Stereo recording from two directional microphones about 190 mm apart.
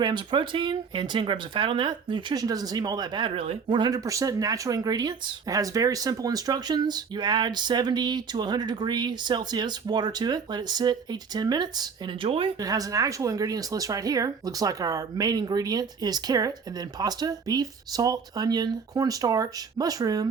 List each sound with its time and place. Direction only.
0.0 s speech: 25° right (ahead or behind)